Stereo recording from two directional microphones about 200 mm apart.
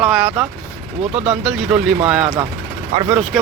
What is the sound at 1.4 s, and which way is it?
Speech, centre (ahead or behind).